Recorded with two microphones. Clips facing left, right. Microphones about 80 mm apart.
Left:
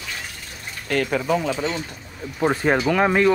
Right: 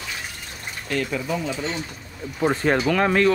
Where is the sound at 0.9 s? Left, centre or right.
Left.